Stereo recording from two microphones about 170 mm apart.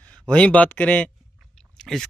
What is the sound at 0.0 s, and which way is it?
Speech, 5° left (ahead or behind).